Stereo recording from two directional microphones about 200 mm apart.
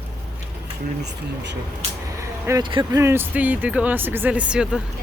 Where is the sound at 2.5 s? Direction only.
20° right (ahead or behind); by 4.8 s 5° right (ahead or behind).